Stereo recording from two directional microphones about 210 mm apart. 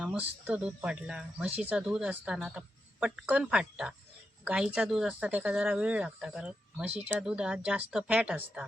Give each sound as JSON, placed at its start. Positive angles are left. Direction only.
{"t": 0.0, "sound": "speech", "side_deg": -5}